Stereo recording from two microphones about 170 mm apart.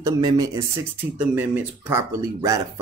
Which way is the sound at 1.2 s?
10° right (ahead or behind).